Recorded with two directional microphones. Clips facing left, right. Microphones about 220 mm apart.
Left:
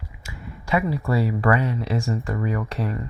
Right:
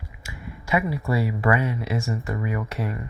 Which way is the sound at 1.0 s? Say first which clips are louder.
Left 2 dB; 10° right (ahead or behind).